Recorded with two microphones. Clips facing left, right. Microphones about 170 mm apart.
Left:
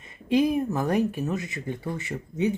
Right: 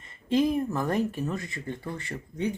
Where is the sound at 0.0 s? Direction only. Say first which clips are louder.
Left 2 dB; 15° left (ahead or behind).